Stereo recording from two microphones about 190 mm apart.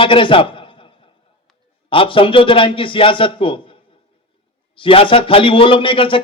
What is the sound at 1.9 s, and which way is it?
A man's voice, 30° left (ahead or behind).